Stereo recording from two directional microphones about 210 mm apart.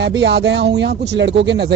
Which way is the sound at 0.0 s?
55° right (ahead or behind).